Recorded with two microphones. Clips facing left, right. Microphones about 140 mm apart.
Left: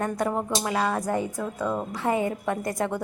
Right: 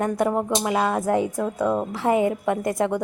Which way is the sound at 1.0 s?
90° right.